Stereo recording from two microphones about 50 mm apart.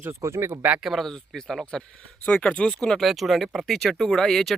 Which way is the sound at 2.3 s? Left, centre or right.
Left.